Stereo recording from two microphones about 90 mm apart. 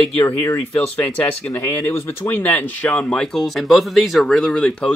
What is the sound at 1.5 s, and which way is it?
Speech, 30° left (ahead or behind).